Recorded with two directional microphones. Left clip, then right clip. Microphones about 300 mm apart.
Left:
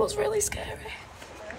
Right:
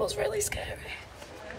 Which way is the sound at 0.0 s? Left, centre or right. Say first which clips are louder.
Left 3 dB; centre.